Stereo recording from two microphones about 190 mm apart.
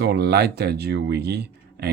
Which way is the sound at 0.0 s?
60° right (ahead or behind).